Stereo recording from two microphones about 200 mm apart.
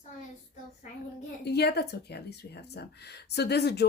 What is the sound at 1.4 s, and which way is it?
A woman's voice, 55° left (ahead or behind).